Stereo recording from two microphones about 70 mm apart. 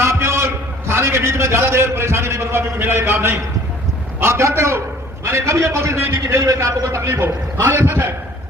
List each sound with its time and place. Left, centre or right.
0.0 s a man's voice: right